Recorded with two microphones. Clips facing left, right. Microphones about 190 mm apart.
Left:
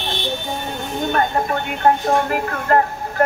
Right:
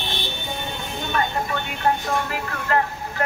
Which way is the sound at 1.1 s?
50° left (ahead or behind).